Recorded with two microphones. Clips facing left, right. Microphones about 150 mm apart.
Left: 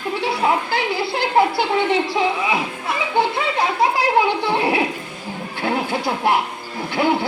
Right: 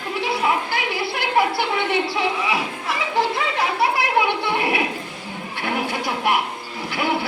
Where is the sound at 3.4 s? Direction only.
30° left (ahead or behind).